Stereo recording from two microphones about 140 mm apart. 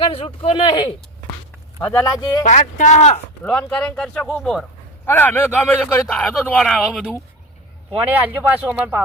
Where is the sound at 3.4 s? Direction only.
10° left (ahead or behind).